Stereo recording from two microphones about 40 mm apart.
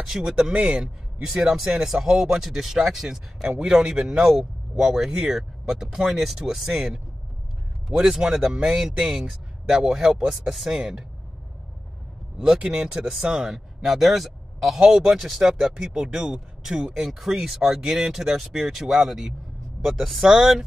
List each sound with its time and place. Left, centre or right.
0.0 s speech: centre
0.4 s speech: centre
8.0 s speech: centre
12.4 s speech: right